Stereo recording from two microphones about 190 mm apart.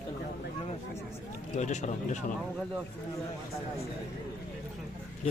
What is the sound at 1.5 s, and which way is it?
Speech, 40° left (ahead or behind).